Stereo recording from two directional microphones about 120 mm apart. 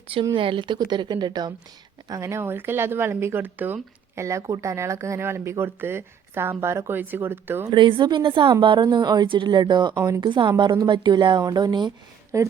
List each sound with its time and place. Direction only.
0.3 s a woman's voice: 45° right (ahead or behind); by 7.7 s 20° right (ahead or behind)
7.7 s a woman's voice: 40° right (ahead or behind)
12.3 s speech: 25° right (ahead or behind)